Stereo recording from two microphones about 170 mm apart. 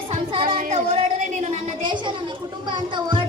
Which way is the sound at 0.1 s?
30° right (ahead or behind).